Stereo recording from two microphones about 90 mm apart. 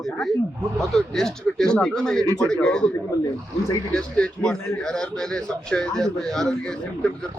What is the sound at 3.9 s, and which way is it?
A man's voice, 10° left (ahead or behind).